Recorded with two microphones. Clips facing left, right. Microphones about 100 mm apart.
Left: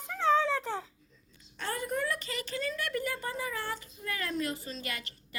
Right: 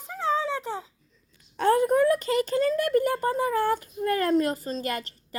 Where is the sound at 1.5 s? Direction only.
50° right (ahead or behind).